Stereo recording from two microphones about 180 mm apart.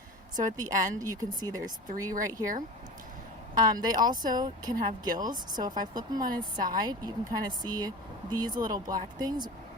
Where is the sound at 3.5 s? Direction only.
20° right (ahead or behind).